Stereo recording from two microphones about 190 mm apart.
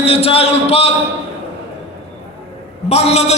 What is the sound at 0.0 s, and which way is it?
Speech, 30° left (ahead or behind).